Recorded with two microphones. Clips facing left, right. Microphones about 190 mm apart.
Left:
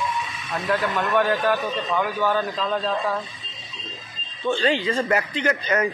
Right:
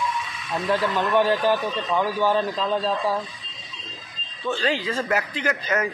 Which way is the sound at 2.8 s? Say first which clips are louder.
Right 1 dB; centre (ahead or behind).